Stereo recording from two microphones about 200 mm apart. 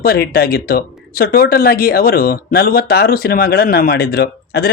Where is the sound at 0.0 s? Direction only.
50° left (ahead or behind).